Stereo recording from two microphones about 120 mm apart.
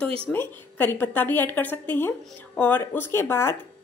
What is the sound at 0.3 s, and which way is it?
A woman's voice, 15° left (ahead or behind).